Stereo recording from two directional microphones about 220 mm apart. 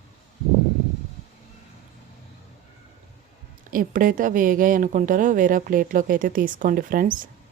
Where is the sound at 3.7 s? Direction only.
40° right (ahead or behind).